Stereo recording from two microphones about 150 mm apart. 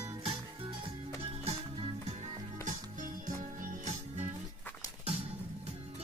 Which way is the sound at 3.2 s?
60° right (ahead or behind).